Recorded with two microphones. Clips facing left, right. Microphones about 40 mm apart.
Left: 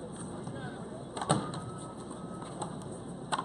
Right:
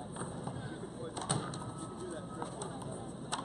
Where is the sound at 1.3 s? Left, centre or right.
Left.